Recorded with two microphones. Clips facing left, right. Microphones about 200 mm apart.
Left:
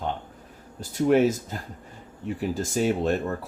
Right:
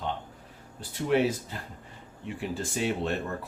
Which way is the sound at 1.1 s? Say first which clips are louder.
Left 5 dB; 45° left (ahead or behind).